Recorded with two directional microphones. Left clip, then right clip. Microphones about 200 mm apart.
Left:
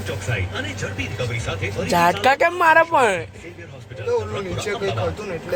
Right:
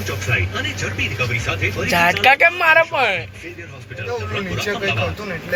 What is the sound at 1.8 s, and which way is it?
Speech, 25° left (ahead or behind).